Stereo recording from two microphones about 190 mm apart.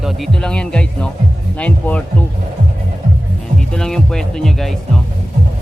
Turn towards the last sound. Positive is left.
turn(degrees=0)  # may be behind; listen again after turning